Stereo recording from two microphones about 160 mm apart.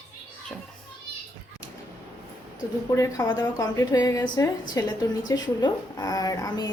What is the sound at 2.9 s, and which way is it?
A woman's voice, 20° left (ahead or behind).